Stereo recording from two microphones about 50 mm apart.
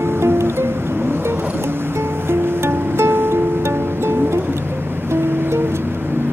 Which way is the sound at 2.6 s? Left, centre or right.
Right.